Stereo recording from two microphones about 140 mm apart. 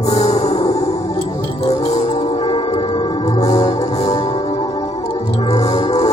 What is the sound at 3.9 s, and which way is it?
Music, 50° left (ahead or behind).